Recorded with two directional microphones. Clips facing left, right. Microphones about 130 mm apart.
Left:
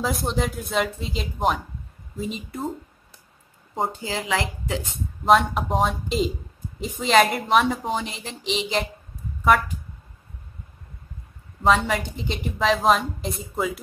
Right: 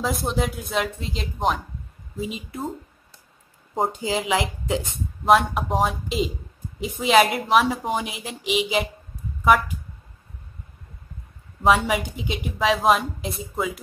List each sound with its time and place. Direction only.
0.0 s a woman's voice: centre (ahead or behind)
3.9 s a woman's voice: 15° right (ahead or behind)
5.2 s a woman's voice: centre (ahead or behind)
11.6 s a woman's voice: 5° right (ahead or behind)